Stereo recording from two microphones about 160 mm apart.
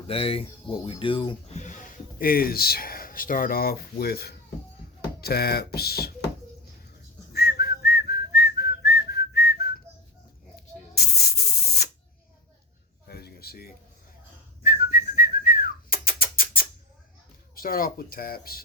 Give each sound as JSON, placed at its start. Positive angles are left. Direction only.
{"t": 0.1, "sound": "speech", "side_deg": 35}
{"t": 1.5, "sound": "speech", "side_deg": 50}
{"t": 7.3, "sound": "whistling", "side_deg": 85}
{"t": 10.9, "sound": "spray", "side_deg": 80}
{"t": 13.1, "sound": "a sound", "side_deg": 75}
{"t": 14.6, "sound": "whistling", "side_deg": 65}
{"t": 17.5, "sound": "speech", "side_deg": 65}